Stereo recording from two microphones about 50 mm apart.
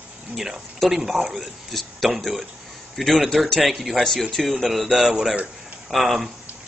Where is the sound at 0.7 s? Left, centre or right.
Centre.